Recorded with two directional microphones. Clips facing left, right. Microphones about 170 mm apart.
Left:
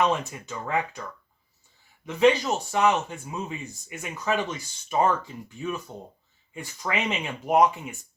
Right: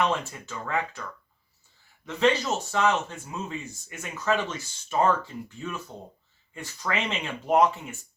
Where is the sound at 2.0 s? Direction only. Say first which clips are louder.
Left 3 dB; 15° left (ahead or behind).